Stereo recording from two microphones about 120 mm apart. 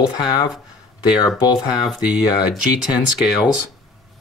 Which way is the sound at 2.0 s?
10° right (ahead or behind).